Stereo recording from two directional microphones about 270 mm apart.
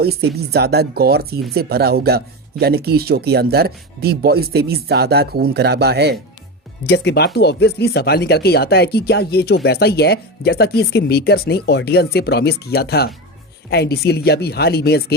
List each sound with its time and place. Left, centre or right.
0.0 s speech: right
6.8 s speech: left